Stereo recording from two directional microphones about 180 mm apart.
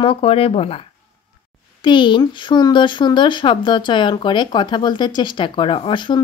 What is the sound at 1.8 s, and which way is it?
Speech, 25° left (ahead or behind).